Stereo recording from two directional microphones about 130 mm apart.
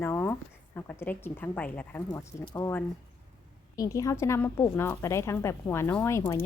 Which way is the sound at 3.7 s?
25° left (ahead or behind).